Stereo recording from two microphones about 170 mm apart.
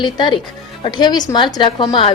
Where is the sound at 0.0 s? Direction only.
25° left (ahead or behind).